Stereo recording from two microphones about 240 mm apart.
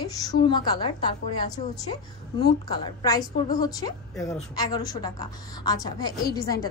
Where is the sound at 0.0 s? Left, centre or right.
Centre.